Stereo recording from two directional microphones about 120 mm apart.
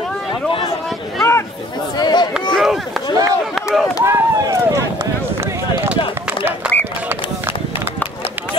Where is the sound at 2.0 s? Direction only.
35° left (ahead or behind).